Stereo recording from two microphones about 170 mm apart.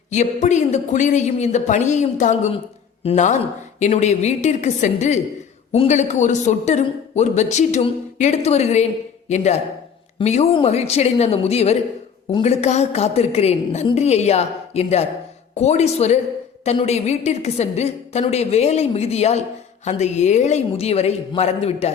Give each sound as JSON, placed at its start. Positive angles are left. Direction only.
{"t": 0.1, "sound": "a man's voice", "side_deg": 45}